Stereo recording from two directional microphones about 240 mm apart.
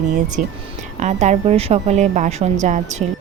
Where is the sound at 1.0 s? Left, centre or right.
Right.